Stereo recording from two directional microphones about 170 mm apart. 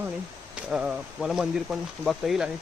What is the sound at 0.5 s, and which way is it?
Speech, 5° right (ahead or behind).